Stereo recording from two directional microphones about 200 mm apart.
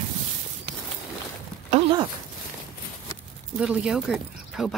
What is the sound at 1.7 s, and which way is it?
Speech, 25° right (ahead or behind).